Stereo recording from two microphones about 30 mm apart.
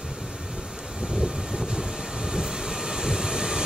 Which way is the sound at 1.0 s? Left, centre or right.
Right.